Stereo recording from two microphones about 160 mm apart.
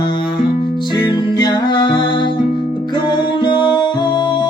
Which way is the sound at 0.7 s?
25° left (ahead or behind).